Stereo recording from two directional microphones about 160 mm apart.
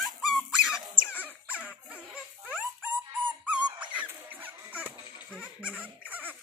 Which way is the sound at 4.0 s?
10° right (ahead or behind).